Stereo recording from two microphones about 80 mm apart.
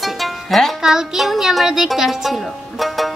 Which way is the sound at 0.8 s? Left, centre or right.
Centre.